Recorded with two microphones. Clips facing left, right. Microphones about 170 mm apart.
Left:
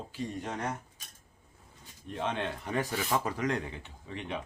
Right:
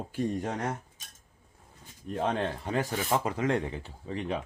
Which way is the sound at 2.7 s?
20° right (ahead or behind).